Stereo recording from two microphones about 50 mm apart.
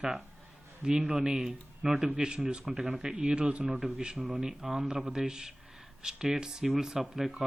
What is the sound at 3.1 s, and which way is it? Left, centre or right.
A man's voice, right.